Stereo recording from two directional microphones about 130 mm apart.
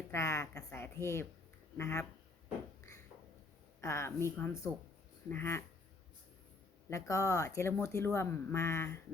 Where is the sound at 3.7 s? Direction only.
20° left (ahead or behind).